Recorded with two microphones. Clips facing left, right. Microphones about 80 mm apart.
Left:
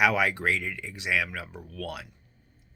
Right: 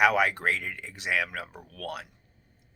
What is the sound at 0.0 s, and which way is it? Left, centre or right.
Speech, right.